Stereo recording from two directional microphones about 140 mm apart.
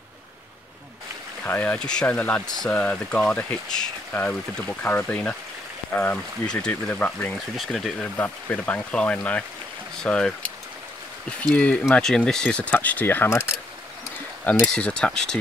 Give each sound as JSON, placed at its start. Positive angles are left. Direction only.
{"t": 1.4, "sound": "speech", "side_deg": 10}
{"t": 7.5, "sound": "speech", "side_deg": 0}
{"t": 14.6, "sound": "speech", "side_deg": 5}